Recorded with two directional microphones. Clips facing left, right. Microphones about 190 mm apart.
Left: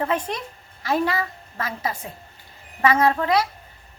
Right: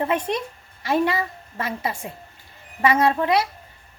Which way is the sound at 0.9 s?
25° right (ahead or behind).